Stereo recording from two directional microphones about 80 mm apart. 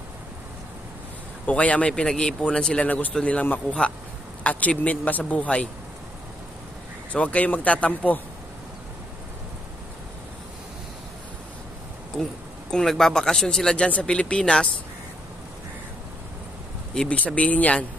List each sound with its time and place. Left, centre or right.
1.4 s speech: centre
7.1 s speech: centre
12.7 s speech: centre
16.9 s speech: centre